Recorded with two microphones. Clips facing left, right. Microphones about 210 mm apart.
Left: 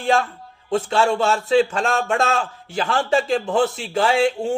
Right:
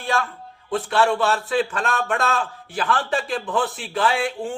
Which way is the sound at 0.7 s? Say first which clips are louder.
Left 1 dB; 25° left (ahead or behind).